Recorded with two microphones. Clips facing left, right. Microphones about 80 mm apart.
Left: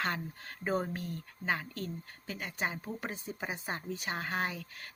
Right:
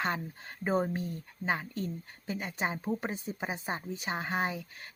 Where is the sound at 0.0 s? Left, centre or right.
Centre.